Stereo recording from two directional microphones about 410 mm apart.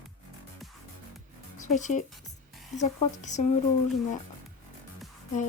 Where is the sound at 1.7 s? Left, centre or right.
Centre.